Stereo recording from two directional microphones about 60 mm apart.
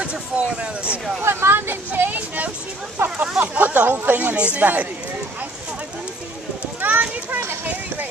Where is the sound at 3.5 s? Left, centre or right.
Right.